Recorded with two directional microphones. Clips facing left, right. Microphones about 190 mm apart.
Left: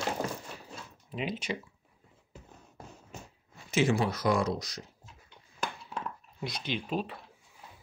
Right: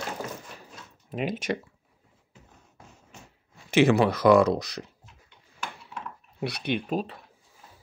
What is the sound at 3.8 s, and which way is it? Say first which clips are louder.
Speech: right 8 dB; 65° right (ahead or behind).